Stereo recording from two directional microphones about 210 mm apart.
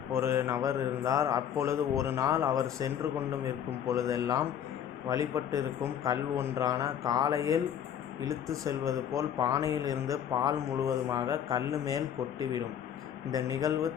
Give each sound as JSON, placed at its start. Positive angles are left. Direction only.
{"t": 0.1, "sound": "speech", "side_deg": -10}